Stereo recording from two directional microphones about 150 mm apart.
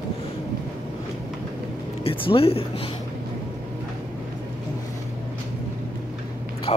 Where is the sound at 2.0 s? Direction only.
40° left (ahead or behind).